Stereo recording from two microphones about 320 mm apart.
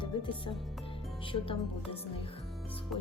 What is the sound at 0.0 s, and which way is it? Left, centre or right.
Speech, centre.